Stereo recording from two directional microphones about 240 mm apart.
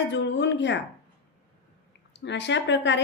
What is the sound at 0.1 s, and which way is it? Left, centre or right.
Speech, left.